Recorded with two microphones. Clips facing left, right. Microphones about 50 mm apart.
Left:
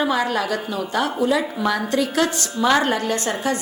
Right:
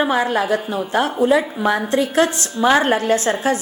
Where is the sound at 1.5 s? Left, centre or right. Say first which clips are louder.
Right 3 dB; right.